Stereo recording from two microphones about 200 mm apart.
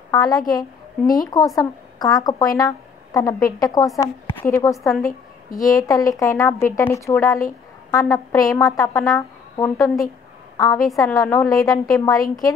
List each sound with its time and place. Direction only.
0.1 s a woman's voice: 15° left (ahead or behind)